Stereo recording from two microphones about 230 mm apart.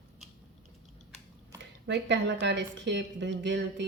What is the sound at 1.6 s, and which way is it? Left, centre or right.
Speech, right.